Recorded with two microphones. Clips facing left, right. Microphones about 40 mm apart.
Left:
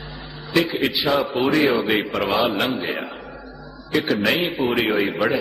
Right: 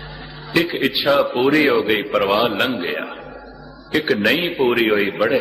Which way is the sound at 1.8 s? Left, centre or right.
Centre.